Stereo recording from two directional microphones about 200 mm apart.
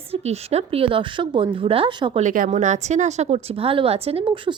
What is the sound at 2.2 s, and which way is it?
Speech, 40° right (ahead or behind).